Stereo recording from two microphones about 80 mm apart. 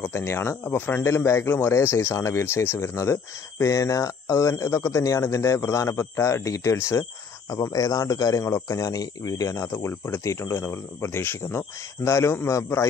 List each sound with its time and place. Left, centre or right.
0.1 s speech: left
1.0 s speech: left